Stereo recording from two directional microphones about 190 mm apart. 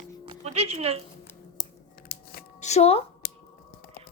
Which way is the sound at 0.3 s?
30° right (ahead or behind).